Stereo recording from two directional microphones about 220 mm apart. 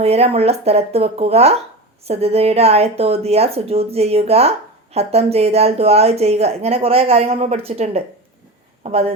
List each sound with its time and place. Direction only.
0.0 s a woman's voice: 30° right (ahead or behind)